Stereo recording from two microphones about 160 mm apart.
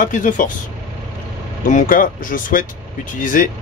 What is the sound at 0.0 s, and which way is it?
Speech, 55° left (ahead or behind).